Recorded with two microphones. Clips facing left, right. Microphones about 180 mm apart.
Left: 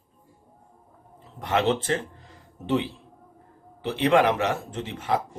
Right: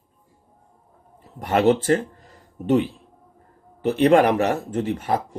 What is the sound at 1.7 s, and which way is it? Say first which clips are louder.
Speech: right 7 dB; 40° right (ahead or behind).